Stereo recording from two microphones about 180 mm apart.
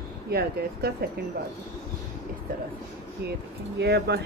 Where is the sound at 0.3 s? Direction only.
60° right (ahead or behind).